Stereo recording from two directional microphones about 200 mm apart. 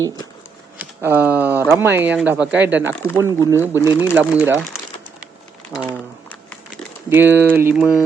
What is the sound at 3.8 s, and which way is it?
Speech, 20° left (ahead or behind).